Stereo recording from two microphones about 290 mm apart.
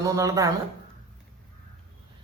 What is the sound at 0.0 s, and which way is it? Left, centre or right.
Speech, centre.